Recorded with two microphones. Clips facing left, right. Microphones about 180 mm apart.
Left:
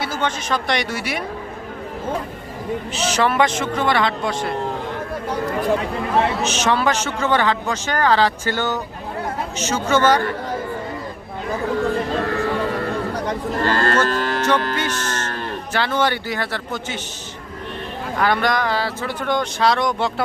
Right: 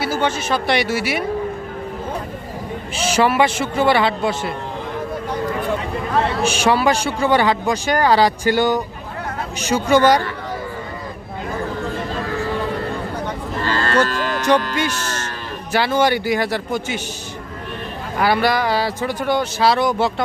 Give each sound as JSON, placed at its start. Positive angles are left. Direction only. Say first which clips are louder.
{"t": 0.0, "sound": "speech", "louder": "right 3 dB", "side_deg": -5}
{"t": 2.9, "sound": "a man's voice", "louder": "right 3 dB", "side_deg": -10}
{"t": 6.4, "sound": "a man's voice", "louder": "right 3 dB", "side_deg": -10}
{"t": 13.6, "sound": "cattle", "louder": "left 2 dB", "side_deg": 50}
{"t": 14.1, "sound": "music", "louder": "left 1 dB", "side_deg": 50}
{"t": 14.8, "sound": "a man's voice", "louder": "right 1 dB", "side_deg": -10}
{"t": 18.2, "sound": "a man's voice", "louder": "right 2 dB", "side_deg": -5}